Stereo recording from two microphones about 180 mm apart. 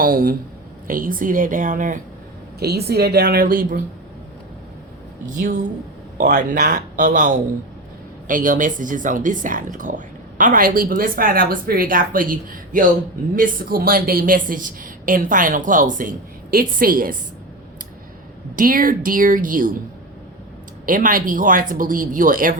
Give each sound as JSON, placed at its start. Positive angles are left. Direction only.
{"t": 0.0, "sound": "a woman's voice", "side_deg": -50}
{"t": 2.6, "sound": "a woman's voice", "side_deg": -65}
{"t": 5.4, "sound": "a woman's voice", "side_deg": -45}
{"t": 18.5, "sound": "a woman's voice", "side_deg": -50}
{"t": 20.8, "sound": "a woman's voice", "side_deg": -50}